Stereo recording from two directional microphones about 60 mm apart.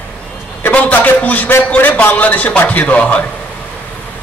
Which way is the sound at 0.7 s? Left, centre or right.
Left.